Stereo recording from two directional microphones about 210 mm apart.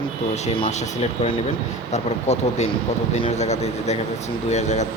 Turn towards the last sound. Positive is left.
turn(degrees=35)  # may be behind; listen again after turning